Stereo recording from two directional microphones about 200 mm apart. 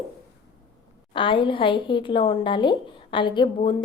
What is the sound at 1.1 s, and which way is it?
A woman's voice, 25° left (ahead or behind).